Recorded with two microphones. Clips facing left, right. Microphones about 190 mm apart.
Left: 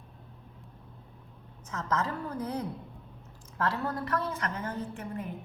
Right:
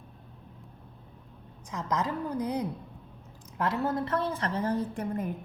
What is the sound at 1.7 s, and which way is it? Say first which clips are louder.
A woman's voice: right 1 dB; 15° right (ahead or behind).